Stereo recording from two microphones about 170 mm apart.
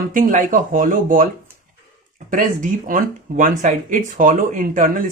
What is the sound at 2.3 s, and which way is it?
Speech, 50° right (ahead or behind).